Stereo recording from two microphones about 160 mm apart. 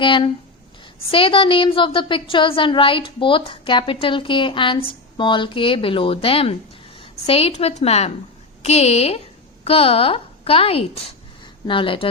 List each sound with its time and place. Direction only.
0.0 s speech: 30° left (ahead or behind)